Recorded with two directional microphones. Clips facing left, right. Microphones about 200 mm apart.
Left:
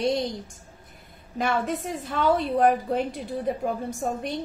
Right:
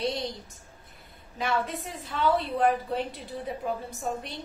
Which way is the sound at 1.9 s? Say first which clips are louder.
Left 2 dB; 50° left (ahead or behind).